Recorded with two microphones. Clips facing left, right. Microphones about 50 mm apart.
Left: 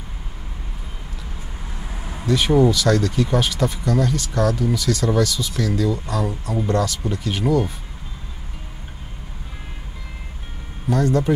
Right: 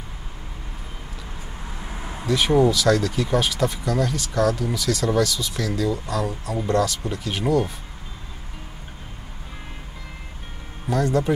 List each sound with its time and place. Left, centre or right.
1.9 s vehicle: centre
2.2 s speech: centre
10.9 s speech: centre